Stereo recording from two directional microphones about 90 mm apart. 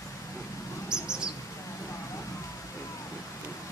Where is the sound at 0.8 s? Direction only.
10° right (ahead or behind).